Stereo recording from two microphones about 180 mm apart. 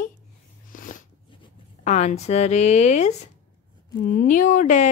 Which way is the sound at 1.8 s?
40° left (ahead or behind).